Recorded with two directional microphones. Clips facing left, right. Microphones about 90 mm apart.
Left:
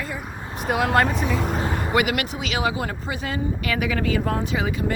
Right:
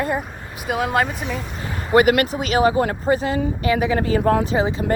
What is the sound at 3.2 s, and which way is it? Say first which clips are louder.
Speech: right 5 dB; 30° right (ahead or behind).